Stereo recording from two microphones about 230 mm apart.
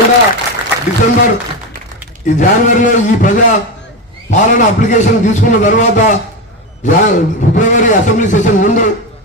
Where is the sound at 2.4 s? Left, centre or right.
Left.